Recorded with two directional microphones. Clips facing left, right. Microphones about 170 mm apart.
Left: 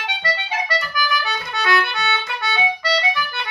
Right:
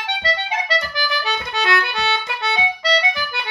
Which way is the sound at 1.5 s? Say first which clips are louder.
Left 1 dB; 25° right (ahead or behind).